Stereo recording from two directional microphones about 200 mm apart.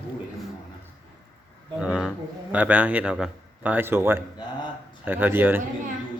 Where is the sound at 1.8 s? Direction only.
5° right (ahead or behind).